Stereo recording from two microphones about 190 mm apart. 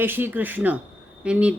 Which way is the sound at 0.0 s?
10° right (ahead or behind).